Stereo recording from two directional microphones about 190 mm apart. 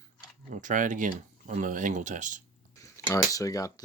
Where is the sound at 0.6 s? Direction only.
45° right (ahead or behind).